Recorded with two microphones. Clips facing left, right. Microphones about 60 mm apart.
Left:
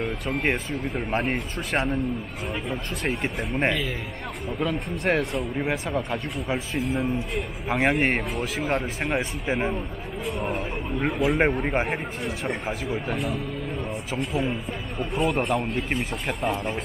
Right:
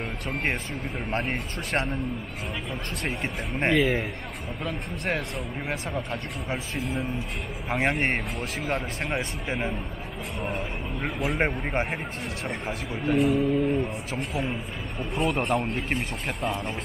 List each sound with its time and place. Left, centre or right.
0.0 s speech: centre